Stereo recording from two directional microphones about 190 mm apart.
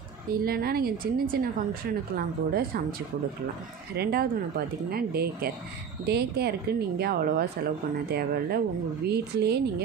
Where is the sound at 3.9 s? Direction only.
55° right (ahead or behind).